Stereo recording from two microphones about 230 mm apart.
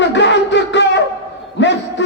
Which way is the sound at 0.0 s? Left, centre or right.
Left.